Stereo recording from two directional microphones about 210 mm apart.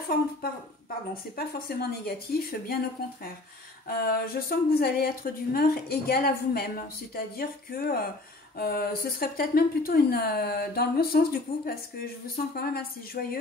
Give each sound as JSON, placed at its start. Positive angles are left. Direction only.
{"t": 1.3, "sound": "speech", "side_deg": 45}
{"t": 3.9, "sound": "speech", "side_deg": 45}